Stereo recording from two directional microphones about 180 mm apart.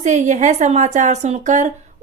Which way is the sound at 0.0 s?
40° right (ahead or behind).